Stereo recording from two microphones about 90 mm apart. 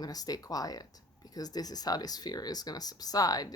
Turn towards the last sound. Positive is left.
turn(degrees=45)  # may be behind; listen again after turning